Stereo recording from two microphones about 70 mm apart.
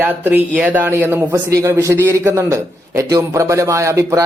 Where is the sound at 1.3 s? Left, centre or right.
Right.